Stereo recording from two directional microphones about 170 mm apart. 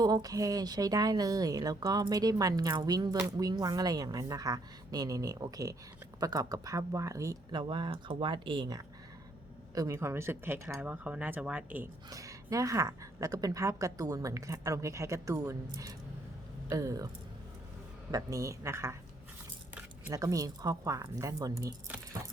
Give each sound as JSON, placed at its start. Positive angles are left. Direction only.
{"t": 0.0, "sound": "speech", "side_deg": -25}
{"t": 18.1, "sound": "a woman's voice", "side_deg": -20}
{"t": 20.1, "sound": "speech", "side_deg": -20}